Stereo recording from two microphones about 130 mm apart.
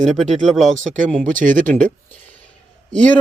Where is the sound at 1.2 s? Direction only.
90° right.